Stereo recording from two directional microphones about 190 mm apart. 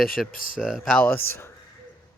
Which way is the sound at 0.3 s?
45° left (ahead or behind).